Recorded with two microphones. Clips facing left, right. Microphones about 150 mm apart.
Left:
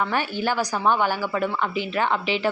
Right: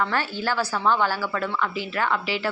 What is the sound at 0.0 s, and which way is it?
A woman's voice, 15° left (ahead or behind).